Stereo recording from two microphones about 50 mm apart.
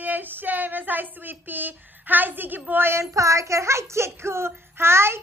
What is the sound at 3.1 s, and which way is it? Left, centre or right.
Child singing, right.